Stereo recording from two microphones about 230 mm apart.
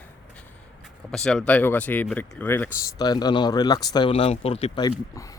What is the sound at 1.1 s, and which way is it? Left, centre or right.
Speech, centre.